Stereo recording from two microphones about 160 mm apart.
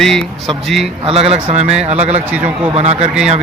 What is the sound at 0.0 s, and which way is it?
Speech, centre (ahead or behind).